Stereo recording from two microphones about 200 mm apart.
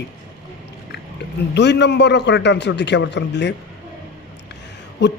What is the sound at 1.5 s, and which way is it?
Speech, 60° left (ahead or behind).